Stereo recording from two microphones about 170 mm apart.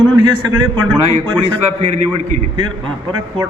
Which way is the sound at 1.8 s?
40° right (ahead or behind).